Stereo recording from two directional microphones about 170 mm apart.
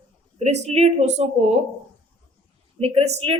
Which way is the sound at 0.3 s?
40° right (ahead or behind).